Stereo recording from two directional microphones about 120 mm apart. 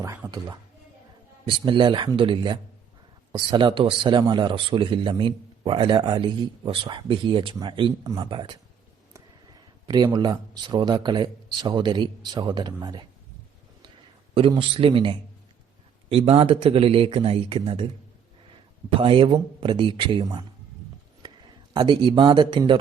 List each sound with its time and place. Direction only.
0.0 s a man's voice: 30° right (ahead or behind)
1.5 s speech: 45° right (ahead or behind)
9.8 s a man's voice: 40° right (ahead or behind)
14.3 s speech: 50° right (ahead or behind)
18.9 s a man's voice: 45° right (ahead or behind)